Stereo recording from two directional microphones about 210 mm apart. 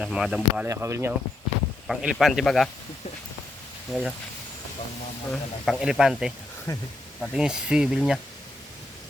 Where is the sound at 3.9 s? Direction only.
Centre (ahead or behind).